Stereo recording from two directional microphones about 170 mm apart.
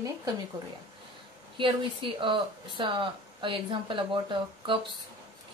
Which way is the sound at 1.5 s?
30° right (ahead or behind).